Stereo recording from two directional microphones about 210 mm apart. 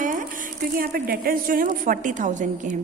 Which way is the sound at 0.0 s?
40° right (ahead or behind).